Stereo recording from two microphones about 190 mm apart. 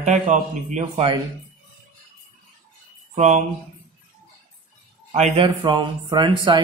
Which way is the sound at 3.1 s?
40° right (ahead or behind).